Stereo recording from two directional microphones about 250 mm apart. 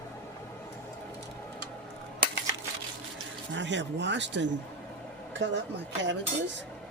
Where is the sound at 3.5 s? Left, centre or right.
Right.